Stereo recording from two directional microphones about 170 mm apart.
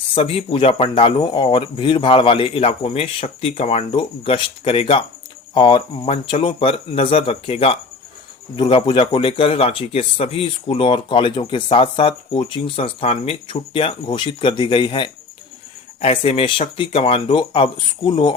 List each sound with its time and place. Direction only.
0.1 s speech: 30° left (ahead or behind)